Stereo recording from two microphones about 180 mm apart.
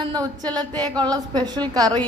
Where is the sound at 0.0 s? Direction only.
25° right (ahead or behind).